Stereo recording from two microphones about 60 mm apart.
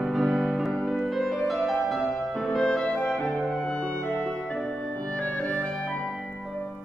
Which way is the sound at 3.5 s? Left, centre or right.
Centre.